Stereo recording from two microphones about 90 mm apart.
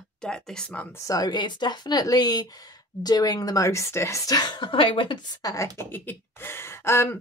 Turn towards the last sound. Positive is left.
turn(degrees=30)  # may be behind; listen again after turning